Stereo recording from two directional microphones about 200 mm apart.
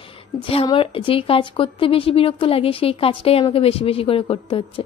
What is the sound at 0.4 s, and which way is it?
A woman's voice, 25° left (ahead or behind).